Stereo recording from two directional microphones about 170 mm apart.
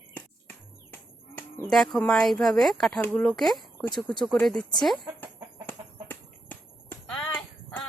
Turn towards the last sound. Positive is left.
turn(degrees=5)  # may be behind; listen again after turning